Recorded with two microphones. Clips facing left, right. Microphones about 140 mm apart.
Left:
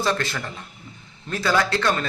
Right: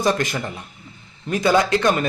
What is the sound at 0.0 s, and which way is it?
Speech, 15° right (ahead or behind).